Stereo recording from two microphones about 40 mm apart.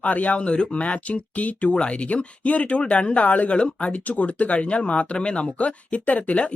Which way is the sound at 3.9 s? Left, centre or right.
Left.